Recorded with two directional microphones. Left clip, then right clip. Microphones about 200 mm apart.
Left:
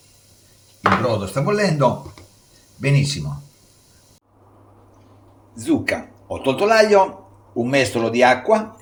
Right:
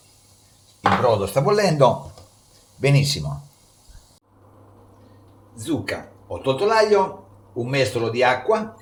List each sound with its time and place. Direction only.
1.2 s speech: 30° right (ahead or behind)
5.5 s a man's voice: 35° left (ahead or behind)